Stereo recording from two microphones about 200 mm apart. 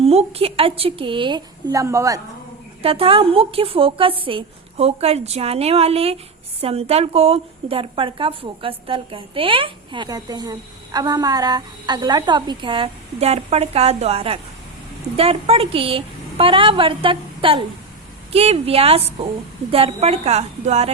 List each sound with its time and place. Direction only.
0.0 s a woman's voice: 30° right (ahead or behind)
2.8 s a woman's voice: 30° right (ahead or behind)